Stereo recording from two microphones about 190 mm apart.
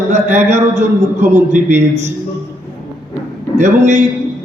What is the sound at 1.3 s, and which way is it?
Speech, 10° right (ahead or behind).